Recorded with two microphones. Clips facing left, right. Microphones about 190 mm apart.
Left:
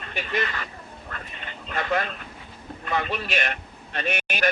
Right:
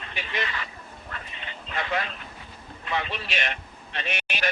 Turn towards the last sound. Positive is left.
turn(degrees=50)  # may be behind; listen again after turning